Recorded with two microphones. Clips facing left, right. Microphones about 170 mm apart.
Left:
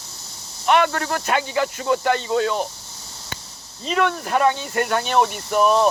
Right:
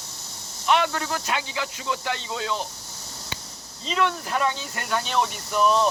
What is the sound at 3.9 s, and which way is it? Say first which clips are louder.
Speech: left 4 dB; 55° left (ahead or behind).